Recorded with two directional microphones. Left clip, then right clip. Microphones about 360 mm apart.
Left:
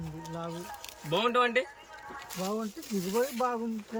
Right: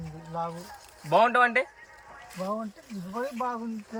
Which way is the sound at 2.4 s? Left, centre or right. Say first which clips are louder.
Right 2 dB; centre.